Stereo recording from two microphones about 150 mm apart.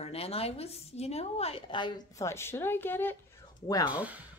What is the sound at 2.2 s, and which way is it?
Speech, 15° left (ahead or behind).